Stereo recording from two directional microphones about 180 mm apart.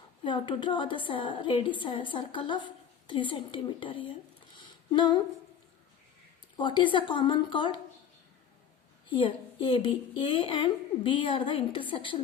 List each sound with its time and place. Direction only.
0.3 s speech: 25° left (ahead or behind)
4.5 s a sound: 25° left (ahead or behind)
6.6 s speech: 25° left (ahead or behind)
9.0 s speech: 30° left (ahead or behind)